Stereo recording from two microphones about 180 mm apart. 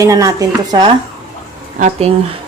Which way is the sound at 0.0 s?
20° right (ahead or behind).